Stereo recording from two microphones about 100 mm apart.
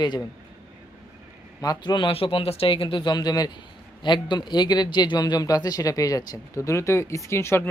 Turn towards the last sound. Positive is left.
turn(degrees=25)  # may be behind; listen again after turning